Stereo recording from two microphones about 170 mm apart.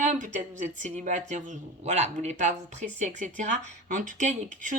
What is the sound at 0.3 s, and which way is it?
Speech, 45° right (ahead or behind).